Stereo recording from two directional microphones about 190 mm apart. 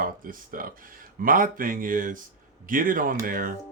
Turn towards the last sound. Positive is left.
turn(degrees=-50)  # may be behind; listen again after turning